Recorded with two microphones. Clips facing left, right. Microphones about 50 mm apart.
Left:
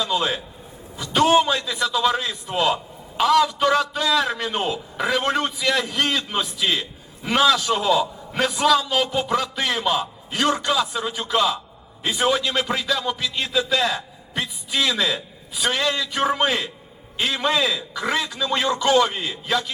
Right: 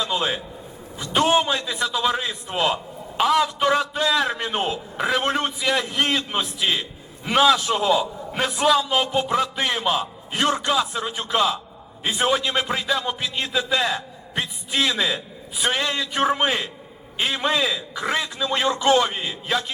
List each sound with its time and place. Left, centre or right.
0.0 s a man's voice: centre
6.6 s a man's voice: centre
18.2 s a man's voice: centre
18.7 s a man's voice: right
19.1 s a man's voice: centre